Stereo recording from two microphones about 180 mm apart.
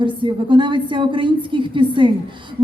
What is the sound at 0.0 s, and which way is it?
Speech, 25° right (ahead or behind).